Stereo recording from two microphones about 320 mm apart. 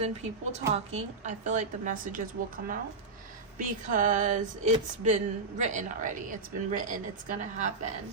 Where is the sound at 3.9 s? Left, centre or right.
Right.